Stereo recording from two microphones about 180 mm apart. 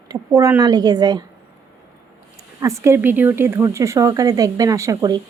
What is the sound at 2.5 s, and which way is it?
A woman's voice, 15° right (ahead or behind).